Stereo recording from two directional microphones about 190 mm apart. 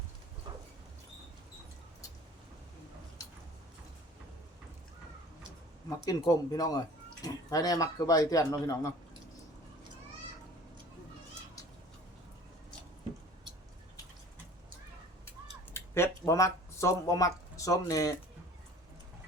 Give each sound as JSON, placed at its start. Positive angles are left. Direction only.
{"t": 6.1, "sound": "a man's voice", "side_deg": 20}
{"t": 15.7, "sound": "speech", "side_deg": 15}